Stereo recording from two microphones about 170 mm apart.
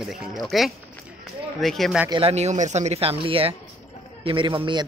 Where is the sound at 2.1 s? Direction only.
35° right (ahead or behind).